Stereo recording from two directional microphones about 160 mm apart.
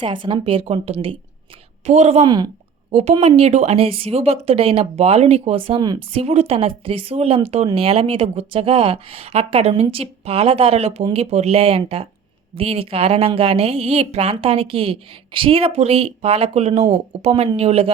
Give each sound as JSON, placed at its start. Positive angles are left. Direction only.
{"t": 0.0, "sound": "a woman's voice", "side_deg": -30}
{"t": 2.2, "sound": "speech", "side_deg": -25}
{"t": 2.9, "sound": "speech", "side_deg": -40}
{"t": 6.2, "sound": "speech", "side_deg": -40}